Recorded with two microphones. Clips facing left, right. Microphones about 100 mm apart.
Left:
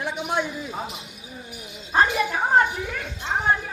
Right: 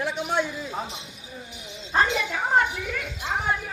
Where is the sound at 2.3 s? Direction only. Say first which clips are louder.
Left 3 dB; 25° left (ahead or behind).